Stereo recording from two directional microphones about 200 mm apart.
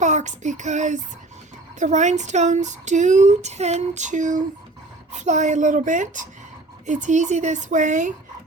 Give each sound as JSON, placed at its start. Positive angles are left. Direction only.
{"t": 0.0, "sound": "speech", "side_deg": -35}